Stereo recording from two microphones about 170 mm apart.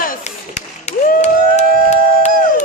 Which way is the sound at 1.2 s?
40° left (ahead or behind).